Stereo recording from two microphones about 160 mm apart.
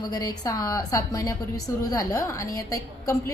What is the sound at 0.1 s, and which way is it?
A woman's voice, 25° left (ahead or behind).